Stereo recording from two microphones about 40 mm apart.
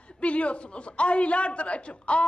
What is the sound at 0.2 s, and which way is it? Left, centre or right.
A man's voice, left.